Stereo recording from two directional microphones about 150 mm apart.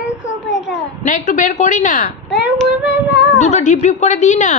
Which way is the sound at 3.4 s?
55° left (ahead or behind).